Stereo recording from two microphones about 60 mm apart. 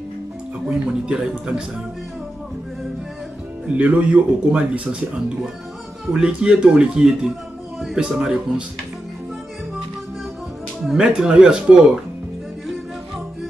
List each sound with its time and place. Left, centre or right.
0.7 s speech: centre
3.6 s speech: right
6.1 s speech: centre
11.0 s speech: centre